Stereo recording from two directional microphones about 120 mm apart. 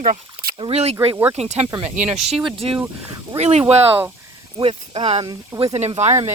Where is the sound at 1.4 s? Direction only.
65° right (ahead or behind).